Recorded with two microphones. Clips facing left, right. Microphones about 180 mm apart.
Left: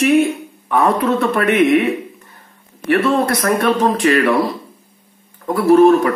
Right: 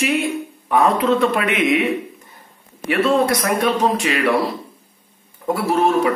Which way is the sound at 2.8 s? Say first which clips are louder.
Left 2 dB; 50° left (ahead or behind).